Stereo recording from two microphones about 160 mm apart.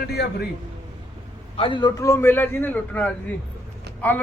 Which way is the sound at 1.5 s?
30° left (ahead or behind).